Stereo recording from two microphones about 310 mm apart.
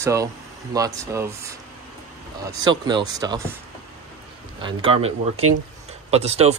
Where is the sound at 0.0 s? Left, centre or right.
Centre.